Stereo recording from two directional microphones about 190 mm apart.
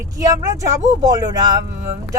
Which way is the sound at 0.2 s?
15° right (ahead or behind).